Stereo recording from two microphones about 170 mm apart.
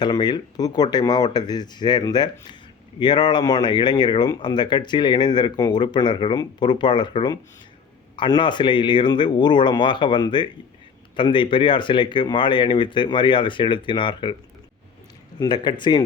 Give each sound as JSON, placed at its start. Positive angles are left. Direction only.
{"t": 0.0, "sound": "speech", "side_deg": 25}
{"t": 15.4, "sound": "speech", "side_deg": 25}